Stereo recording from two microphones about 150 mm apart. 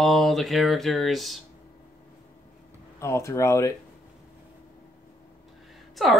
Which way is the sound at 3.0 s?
20° left (ahead or behind).